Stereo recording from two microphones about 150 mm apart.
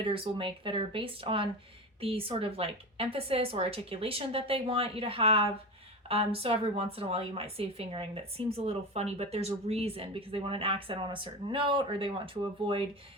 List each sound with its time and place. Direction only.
0.0 s a woman's voice: 35° right (ahead or behind)